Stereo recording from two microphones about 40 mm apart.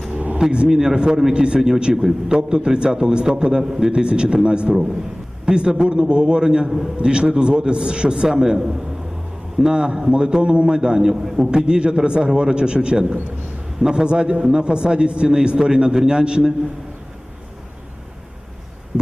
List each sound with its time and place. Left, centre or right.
0.3 s a man's voice: right